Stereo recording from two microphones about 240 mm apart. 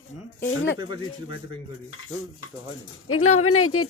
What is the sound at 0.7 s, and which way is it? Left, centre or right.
Speech, centre.